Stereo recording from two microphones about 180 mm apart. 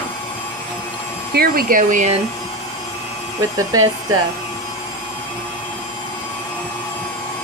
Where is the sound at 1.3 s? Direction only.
55° right (ahead or behind).